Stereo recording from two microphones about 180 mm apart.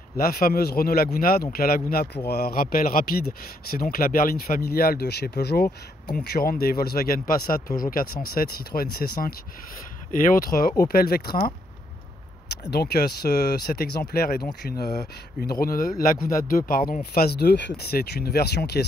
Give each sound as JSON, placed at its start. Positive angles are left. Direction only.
{"t": 0.2, "sound": "speech", "side_deg": 55}
{"t": 12.6, "sound": "speech", "side_deg": 65}